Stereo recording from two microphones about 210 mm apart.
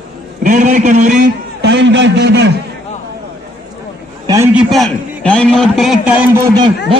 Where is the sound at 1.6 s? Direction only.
55° right (ahead or behind).